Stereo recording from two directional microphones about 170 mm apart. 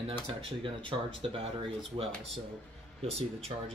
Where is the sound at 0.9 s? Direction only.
25° right (ahead or behind).